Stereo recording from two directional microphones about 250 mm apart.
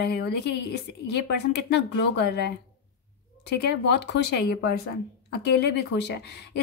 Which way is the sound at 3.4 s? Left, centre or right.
Left.